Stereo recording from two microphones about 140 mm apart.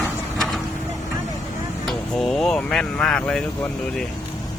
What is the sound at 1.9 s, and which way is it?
Speech, centre (ahead or behind).